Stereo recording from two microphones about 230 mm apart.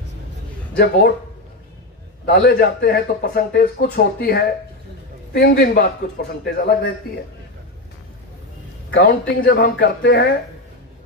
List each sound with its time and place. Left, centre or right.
0.7 s speech: left
2.2 s a man's voice: left
8.9 s a man's voice: left